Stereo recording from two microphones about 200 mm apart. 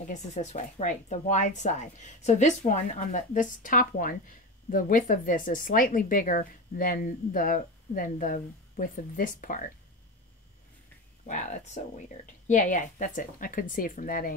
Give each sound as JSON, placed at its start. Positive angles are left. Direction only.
{"t": 0.1, "sound": "speech", "side_deg": 35}
{"t": 11.2, "sound": "speech", "side_deg": 35}